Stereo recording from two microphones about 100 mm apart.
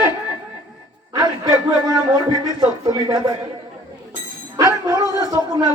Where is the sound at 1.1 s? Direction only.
40° right (ahead or behind).